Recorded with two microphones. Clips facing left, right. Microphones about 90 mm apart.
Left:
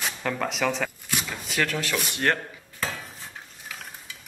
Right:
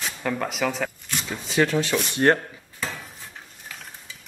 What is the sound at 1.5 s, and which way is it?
Speech, 20° right (ahead or behind).